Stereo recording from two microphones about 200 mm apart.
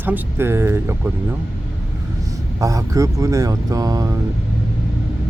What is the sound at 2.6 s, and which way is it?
Speech, 15° right (ahead or behind).